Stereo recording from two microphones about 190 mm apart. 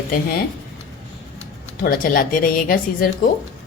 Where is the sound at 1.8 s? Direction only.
50° left (ahead or behind).